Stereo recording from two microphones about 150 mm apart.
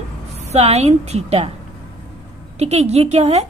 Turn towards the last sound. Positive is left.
turn(degrees=-45)  # may be behind; listen again after turning